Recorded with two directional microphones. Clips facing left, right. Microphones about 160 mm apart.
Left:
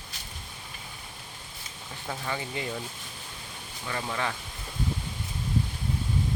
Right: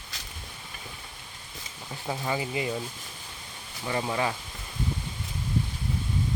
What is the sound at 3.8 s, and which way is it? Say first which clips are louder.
Speech: right 4 dB; 20° right (ahead or behind).